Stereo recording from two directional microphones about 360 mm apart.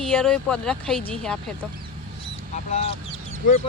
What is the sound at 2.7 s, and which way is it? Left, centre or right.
Speech, centre.